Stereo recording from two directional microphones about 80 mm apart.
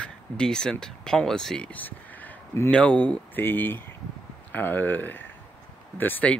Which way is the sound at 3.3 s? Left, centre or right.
Left.